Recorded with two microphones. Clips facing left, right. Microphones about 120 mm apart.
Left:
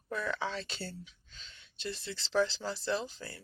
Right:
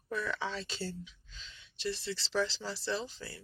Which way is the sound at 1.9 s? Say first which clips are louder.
Right 1 dB; 45° left (ahead or behind).